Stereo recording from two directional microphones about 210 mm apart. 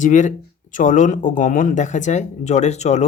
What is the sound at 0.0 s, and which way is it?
Speech, 35° left (ahead or behind).